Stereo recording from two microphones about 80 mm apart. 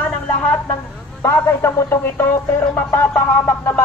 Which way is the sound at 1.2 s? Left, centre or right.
Left.